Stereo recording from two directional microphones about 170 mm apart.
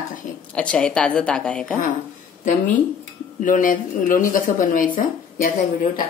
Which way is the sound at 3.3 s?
50° left (ahead or behind).